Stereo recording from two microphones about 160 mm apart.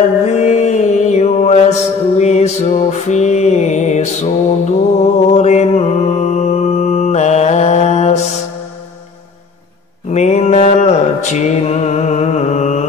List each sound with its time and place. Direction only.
0.2 s mantra: 50° left (ahead or behind)
10.1 s mantra: 45° left (ahead or behind)